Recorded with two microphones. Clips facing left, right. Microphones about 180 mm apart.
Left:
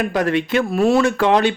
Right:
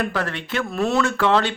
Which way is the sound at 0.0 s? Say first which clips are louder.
Left 7 dB; 15° left (ahead or behind).